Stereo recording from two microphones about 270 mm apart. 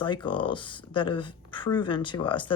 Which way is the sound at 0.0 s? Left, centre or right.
Centre.